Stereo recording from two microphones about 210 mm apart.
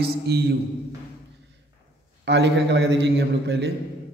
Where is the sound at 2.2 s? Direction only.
55° right (ahead or behind).